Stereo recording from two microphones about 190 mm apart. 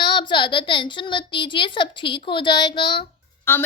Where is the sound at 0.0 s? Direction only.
25° left (ahead or behind).